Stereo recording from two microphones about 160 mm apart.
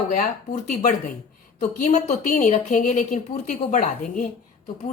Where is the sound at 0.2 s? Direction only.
65° left (ahead or behind).